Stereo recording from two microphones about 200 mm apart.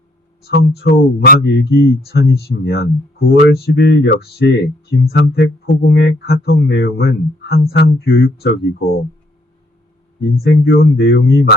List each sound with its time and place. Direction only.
0.4 s speech: 55° left (ahead or behind)
10.4 s speech: 50° left (ahead or behind)